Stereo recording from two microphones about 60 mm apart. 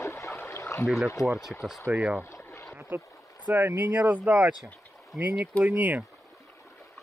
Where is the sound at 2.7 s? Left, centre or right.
Right.